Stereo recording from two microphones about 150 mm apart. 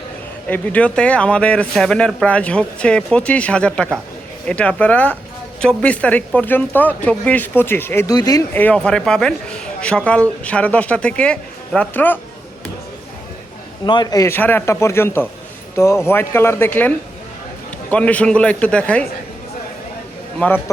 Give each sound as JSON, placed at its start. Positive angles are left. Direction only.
{"t": 0.4, "sound": "a man's voice", "side_deg": 10}
{"t": 8.5, "sound": "a man's voice", "side_deg": 10}
{"t": 13.8, "sound": "a man's voice", "side_deg": 30}
{"t": 17.9, "sound": "a man's voice", "side_deg": 10}
{"t": 20.4, "sound": "a man's voice", "side_deg": 10}